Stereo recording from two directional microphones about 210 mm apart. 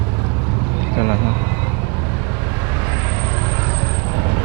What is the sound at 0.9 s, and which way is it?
Speech, 20° right (ahead or behind).